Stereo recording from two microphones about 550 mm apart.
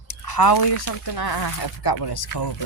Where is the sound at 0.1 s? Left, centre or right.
Left.